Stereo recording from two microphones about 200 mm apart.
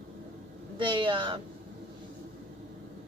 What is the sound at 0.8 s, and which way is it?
Speech, 25° right (ahead or behind).